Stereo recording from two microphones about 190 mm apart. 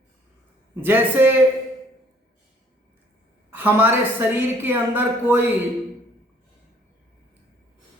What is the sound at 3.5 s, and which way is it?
A woman's voice, 10° right (ahead or behind).